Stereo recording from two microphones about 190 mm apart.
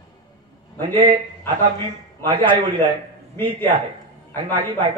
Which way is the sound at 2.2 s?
25° right (ahead or behind).